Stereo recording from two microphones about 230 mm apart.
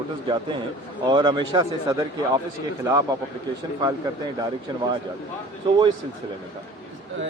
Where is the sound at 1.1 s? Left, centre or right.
Centre.